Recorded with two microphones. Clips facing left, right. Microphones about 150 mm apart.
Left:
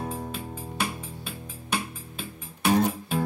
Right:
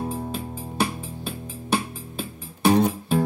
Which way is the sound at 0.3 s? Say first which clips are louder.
Right 4 dB; 35° right (ahead or behind).